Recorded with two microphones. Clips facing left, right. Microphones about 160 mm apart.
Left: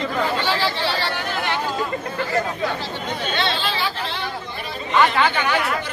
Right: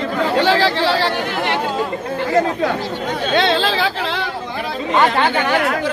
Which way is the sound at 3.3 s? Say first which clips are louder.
Right 9 dB; 90° right.